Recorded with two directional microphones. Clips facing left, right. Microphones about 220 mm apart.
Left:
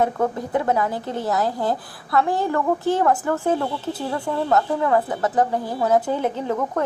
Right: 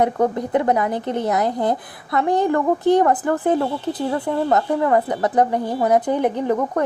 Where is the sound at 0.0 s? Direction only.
20° right (ahead or behind).